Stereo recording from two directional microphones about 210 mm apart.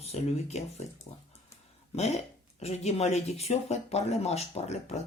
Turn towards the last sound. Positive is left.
turn(degrees=30)  # may be behind; listen again after turning